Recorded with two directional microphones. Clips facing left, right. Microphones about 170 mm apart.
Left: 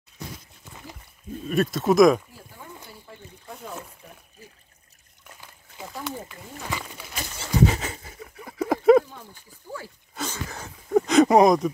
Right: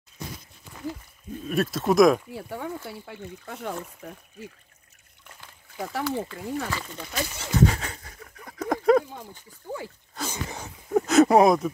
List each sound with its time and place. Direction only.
1.5 s speech: centre (ahead or behind)
2.3 s speech: 70° right (ahead or behind)
2.9 s speech: 80° right
6.0 s speech: 15° left (ahead or behind)
7.5 s a sound: 5° left (ahead or behind)
9.2 s speech: 20° right (ahead or behind)
10.2 s speech: 5° left (ahead or behind)